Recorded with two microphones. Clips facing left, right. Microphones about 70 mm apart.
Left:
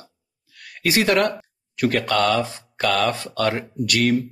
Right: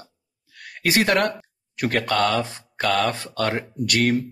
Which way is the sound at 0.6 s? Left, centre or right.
Right.